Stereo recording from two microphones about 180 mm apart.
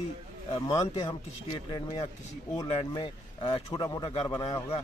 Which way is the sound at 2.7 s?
30° left (ahead or behind).